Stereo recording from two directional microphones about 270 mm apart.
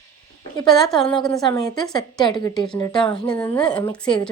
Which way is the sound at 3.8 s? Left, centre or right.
Centre.